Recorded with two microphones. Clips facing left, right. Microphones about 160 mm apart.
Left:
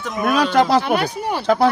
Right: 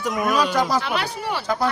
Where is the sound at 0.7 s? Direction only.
55° left (ahead or behind).